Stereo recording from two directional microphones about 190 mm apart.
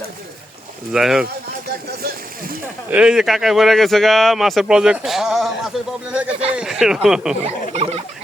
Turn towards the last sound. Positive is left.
turn(degrees=-30)  # may be behind; listen again after turning